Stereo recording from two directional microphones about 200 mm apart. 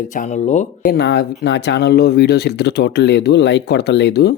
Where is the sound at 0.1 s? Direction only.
40° left (ahead or behind).